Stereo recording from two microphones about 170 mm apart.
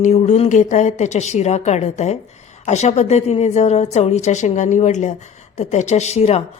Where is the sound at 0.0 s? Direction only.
45° left (ahead or behind).